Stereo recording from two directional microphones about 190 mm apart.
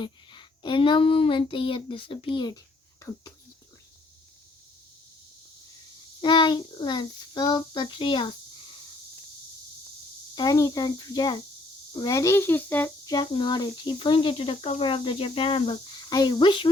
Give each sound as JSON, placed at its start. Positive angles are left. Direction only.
{"t": 0.0, "sound": "speech", "side_deg": 25}
{"t": 6.2, "sound": "speech", "side_deg": 25}
{"t": 10.3, "sound": "a child's voice", "side_deg": 20}
{"t": 13.1, "sound": "speech", "side_deg": 25}